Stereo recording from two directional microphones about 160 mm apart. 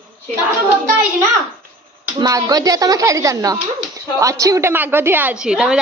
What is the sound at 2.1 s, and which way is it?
Speech, 25° right (ahead or behind).